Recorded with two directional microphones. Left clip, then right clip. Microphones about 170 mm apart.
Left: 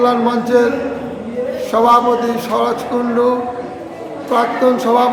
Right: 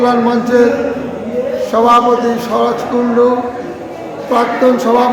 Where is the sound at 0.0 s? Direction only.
15° left (ahead or behind).